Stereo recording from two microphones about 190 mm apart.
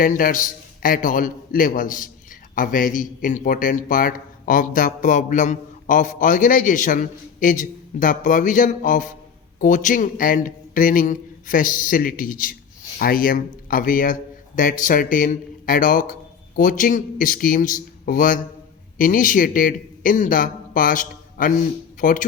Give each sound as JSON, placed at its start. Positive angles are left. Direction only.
{"t": 0.0, "sound": "a man's voice", "side_deg": 45}